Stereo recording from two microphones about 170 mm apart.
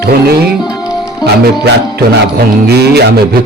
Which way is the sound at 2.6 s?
70° right (ahead or behind).